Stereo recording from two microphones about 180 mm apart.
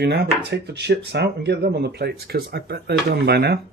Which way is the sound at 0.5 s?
70° right (ahead or behind).